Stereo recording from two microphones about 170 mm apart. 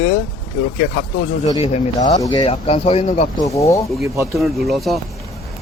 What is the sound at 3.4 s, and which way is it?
Speech, 20° left (ahead or behind).